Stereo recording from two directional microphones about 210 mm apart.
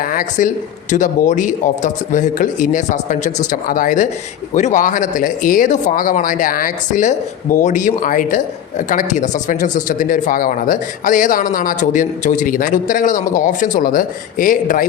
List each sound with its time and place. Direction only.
0.0 s speech: 40° left (ahead or behind)